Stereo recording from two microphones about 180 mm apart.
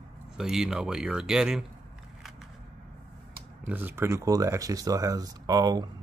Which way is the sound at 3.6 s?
10° right (ahead or behind).